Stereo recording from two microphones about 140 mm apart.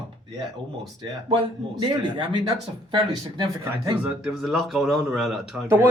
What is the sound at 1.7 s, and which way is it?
Speech, 30° right (ahead or behind).